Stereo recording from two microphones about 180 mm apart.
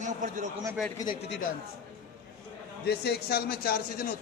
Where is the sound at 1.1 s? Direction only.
70° left (ahead or behind).